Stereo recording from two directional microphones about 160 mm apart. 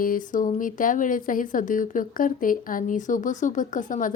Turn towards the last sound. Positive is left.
turn(degrees=55)  # may be behind; listen again after turning